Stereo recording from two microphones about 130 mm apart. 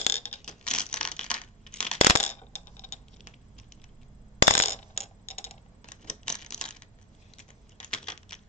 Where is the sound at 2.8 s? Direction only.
65° left (ahead or behind).